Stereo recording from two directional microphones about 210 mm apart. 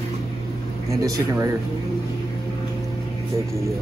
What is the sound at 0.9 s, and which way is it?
Speech, 15° right (ahead or behind).